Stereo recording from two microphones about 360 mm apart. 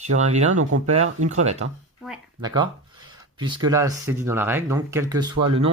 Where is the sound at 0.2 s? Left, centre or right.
Centre.